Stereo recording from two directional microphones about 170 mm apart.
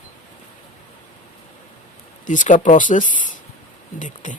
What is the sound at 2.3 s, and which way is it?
Speech, 45° left (ahead or behind).